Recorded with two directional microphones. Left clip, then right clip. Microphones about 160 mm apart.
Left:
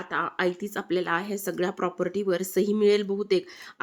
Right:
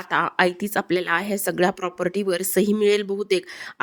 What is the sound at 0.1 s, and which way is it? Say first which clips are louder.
A woman's voice: right 7 dB; 50° right (ahead or behind).